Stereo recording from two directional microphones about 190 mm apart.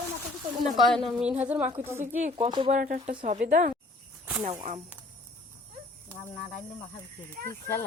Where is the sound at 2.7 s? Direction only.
45° right (ahead or behind).